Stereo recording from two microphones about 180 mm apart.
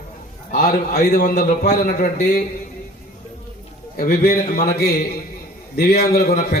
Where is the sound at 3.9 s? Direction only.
55° left (ahead or behind).